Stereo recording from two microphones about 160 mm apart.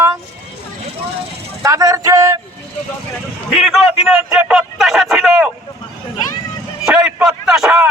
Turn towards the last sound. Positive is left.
turn(degrees=-5)  # may be behind; listen again after turning